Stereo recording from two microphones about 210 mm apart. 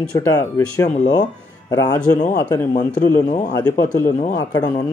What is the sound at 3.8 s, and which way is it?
Speech, 10° left (ahead or behind).